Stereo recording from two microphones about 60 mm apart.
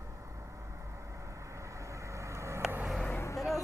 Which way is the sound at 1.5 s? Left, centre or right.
Right.